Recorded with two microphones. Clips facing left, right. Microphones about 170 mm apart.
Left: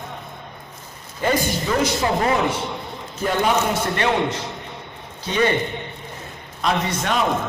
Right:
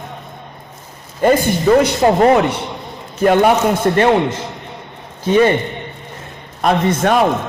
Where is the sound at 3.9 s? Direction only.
50° right (ahead or behind).